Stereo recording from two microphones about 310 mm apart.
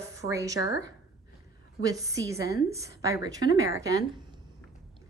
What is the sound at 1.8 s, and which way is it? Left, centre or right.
A woman's voice, centre.